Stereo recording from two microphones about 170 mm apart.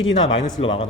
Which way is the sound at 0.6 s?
30° left (ahead or behind).